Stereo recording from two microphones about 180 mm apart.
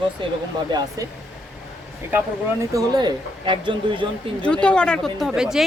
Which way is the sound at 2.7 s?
20° right (ahead or behind).